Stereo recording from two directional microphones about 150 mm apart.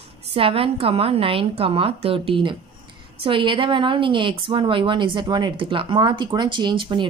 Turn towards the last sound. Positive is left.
turn(degrees=-30)  # may be behind; listen again after turning